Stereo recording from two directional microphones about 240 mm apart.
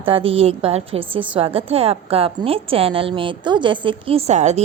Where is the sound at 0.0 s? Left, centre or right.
Right.